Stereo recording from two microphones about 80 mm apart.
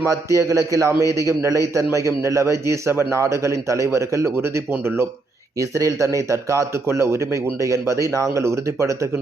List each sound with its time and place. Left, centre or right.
0.0 s speech: right